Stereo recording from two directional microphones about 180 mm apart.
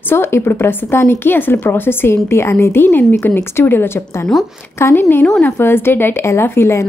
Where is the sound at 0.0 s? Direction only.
15° left (ahead or behind).